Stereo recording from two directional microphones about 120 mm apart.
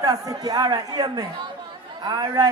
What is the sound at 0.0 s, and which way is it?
A man's voice, 30° right (ahead or behind).